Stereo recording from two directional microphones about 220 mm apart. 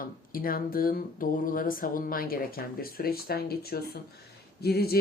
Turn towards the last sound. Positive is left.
turn(degrees=45)  # may be behind; listen again after turning